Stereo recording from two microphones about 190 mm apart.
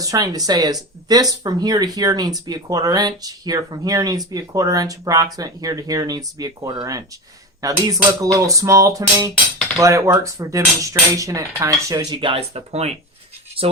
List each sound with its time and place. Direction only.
0.0 s speech: 20° right (ahead or behind)